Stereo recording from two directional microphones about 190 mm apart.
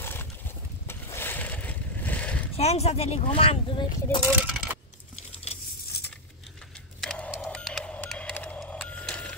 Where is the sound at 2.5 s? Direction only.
35° left (ahead or behind).